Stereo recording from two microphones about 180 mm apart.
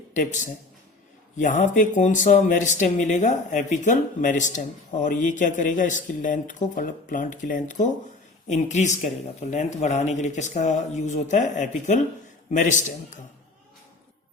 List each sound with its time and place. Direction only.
0.1 s speech: 45° left (ahead or behind)